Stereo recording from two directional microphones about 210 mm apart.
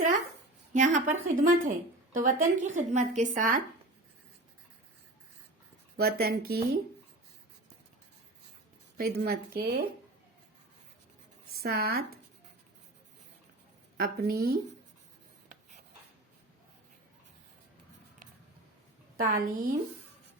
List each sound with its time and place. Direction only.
0.7 s speech: 35° right (ahead or behind)
6.0 s speech: 45° right (ahead or behind)
9.0 s speech: 50° right (ahead or behind)
11.6 s speech: 50° right (ahead or behind)
13.9 s a woman's voice: 45° right (ahead or behind)
19.1 s speech: 45° right (ahead or behind)